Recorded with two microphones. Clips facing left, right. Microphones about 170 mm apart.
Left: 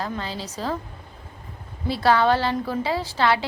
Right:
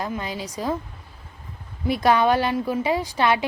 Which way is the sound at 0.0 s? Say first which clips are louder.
Right 1 dB; 15° right (ahead or behind).